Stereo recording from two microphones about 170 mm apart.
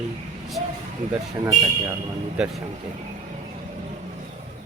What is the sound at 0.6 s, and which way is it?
Speech, 40° right (ahead or behind).